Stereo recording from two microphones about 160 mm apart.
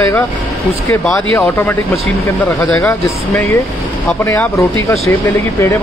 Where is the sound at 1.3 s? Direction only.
15° left (ahead or behind).